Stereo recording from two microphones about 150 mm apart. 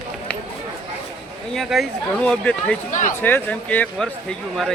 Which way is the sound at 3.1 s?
10° left (ahead or behind).